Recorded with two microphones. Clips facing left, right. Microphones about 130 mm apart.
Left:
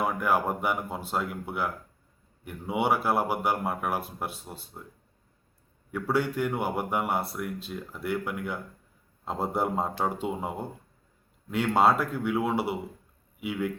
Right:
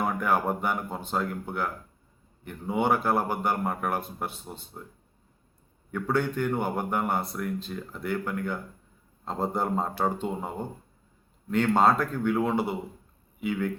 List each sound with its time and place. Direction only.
0.0 s a man's voice: 5° left (ahead or behind)
5.9 s a man's voice: 5° left (ahead or behind)